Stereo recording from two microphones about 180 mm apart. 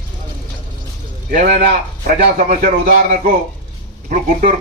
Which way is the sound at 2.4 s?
45° right (ahead or behind).